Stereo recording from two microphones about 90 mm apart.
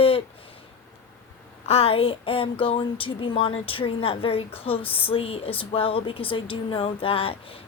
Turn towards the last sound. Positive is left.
turn(degrees=90)